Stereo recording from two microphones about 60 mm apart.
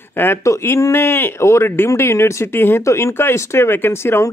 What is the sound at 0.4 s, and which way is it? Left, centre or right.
Speech, left.